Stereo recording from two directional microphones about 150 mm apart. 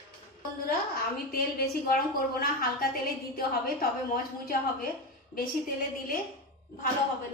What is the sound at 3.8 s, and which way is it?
Speech, 70° left (ahead or behind).